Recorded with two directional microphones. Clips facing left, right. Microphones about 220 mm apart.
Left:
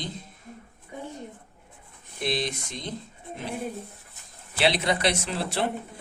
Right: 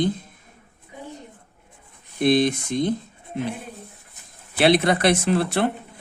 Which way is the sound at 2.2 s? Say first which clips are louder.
Right 11 dB; 55° right (ahead or behind).